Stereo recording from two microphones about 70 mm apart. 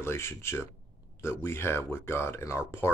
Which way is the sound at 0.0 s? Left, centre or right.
Left.